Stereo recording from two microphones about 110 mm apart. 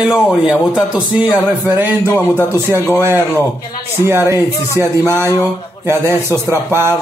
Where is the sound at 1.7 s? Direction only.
15° right (ahead or behind).